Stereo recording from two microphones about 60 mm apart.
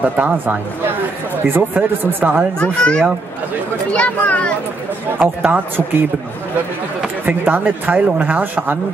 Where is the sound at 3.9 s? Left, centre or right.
Left.